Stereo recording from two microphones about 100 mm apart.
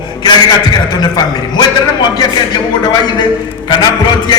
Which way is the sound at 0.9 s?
45° left (ahead or behind).